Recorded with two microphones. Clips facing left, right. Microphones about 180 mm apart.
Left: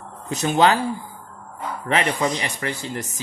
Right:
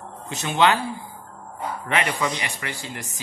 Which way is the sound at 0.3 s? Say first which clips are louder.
Left 3 dB; 40° left (ahead or behind).